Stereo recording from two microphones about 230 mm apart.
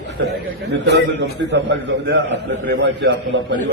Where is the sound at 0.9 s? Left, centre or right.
Right.